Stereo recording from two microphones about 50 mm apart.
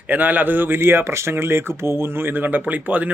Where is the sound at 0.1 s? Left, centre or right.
Right.